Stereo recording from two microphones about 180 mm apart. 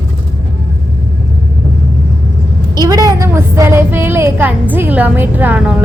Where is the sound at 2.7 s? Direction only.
20° right (ahead or behind).